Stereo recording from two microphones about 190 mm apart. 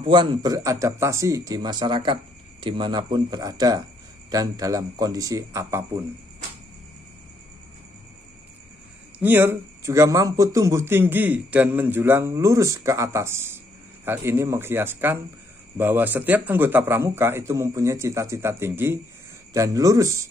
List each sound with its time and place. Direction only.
0.0 s speech: 25° right (ahead or behind)
9.2 s a man's voice: 10° right (ahead or behind)